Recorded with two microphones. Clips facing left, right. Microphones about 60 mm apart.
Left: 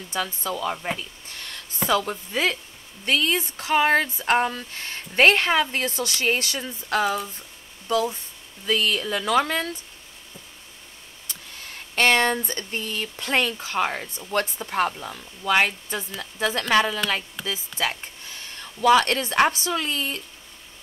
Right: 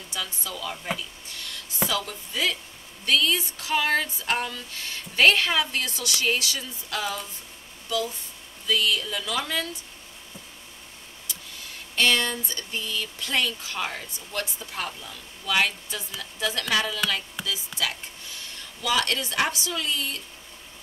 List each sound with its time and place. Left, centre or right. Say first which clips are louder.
0.1 s speech: left 7 dB; left
8.6 s speech: left 2 dB; left
11.9 s speech: left 4 dB; left
17.4 s speech: left 1 dB; centre
18.6 s speech: left 9 dB; left